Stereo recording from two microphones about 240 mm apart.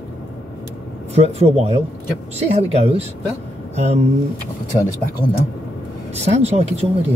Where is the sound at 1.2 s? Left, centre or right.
Right.